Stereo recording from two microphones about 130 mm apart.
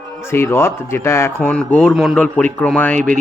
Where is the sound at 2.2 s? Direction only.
10° left (ahead or behind).